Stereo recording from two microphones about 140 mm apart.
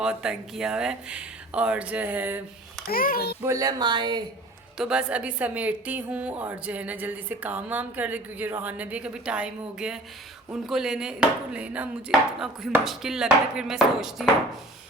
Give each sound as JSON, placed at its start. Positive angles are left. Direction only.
{"t": 0.0, "sound": "a woman's voice", "side_deg": -5}
{"t": 2.9, "sound": "a child's voice", "side_deg": 90}
{"t": 3.4, "sound": "speech", "side_deg": -25}
{"t": 4.8, "sound": "a woman's voice", "side_deg": -5}
{"t": 10.5, "sound": "chopping", "side_deg": -5}